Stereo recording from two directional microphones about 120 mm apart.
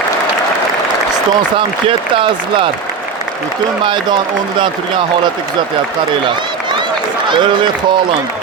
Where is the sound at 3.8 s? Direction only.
40° right (ahead or behind).